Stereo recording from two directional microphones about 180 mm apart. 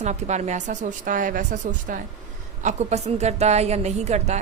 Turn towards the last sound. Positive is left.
turn(degrees=-40)  # may be behind; listen again after turning